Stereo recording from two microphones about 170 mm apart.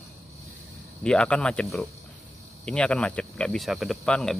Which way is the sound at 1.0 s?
5° left (ahead or behind).